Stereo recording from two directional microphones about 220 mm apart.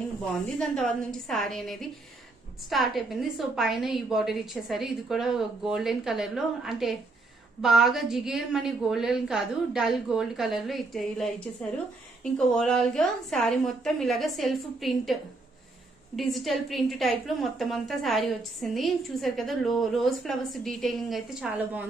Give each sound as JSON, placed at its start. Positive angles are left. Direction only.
{"t": 0.6, "sound": "a woman's voice", "side_deg": 0}
{"t": 16.2, "sound": "a woman's voice", "side_deg": 0}